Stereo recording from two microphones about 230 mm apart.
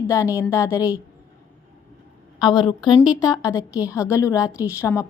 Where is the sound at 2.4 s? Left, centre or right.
Centre.